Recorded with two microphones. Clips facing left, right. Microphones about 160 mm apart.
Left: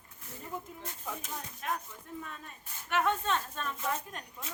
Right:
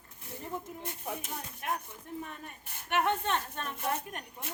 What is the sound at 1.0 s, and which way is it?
Speech, 65° right (ahead or behind).